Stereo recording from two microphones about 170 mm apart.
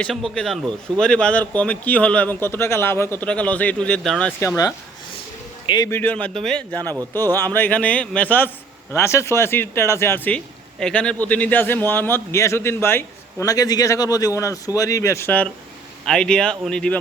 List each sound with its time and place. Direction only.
0.0 s a man's voice: centre (ahead or behind); by 5.9 s 25° left (ahead or behind)
5.9 s a man's voice: 10° left (ahead or behind)